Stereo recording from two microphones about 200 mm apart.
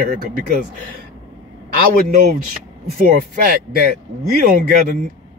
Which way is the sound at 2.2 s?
45° right (ahead or behind).